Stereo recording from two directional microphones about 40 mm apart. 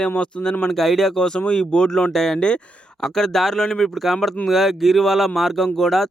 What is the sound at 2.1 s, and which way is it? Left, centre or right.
Speech, centre.